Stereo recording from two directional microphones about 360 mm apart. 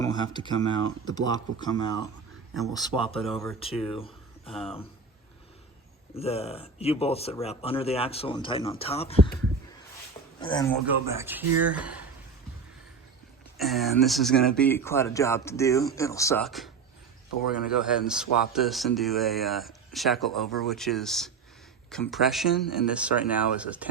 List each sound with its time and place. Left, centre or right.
0.0 s speech: centre
3.2 s speech: centre
3.6 s speech: centre
6.1 s speech: centre
10.4 s a man's voice: centre
10.8 s speech: centre
13.6 s speech: centre